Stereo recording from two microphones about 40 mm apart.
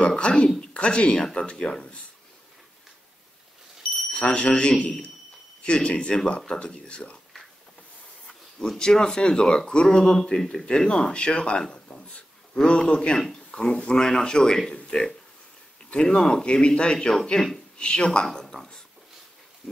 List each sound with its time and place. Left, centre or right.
0.0 s speech: left
4.1 s speech: left
8.7 s speech: centre
11.7 s a sound: left
12.6 s speech: left
18.2 s a sound: centre